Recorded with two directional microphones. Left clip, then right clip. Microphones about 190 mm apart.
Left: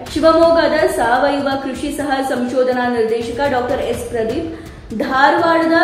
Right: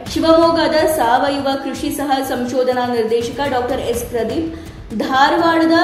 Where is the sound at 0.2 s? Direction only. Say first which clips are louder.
Left 1 dB; 35° right (ahead or behind).